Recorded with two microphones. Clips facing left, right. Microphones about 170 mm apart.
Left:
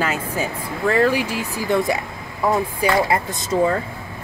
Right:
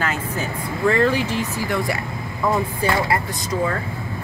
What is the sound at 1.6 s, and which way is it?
Speech, 20° left (ahead or behind).